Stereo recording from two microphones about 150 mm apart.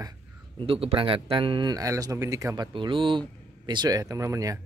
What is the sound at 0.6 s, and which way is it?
Speech, 40° right (ahead or behind).